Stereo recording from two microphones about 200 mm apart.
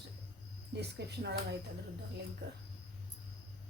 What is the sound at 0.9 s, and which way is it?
Speech, 55° right (ahead or behind).